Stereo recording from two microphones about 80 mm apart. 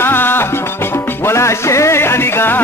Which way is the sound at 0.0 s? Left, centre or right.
Left.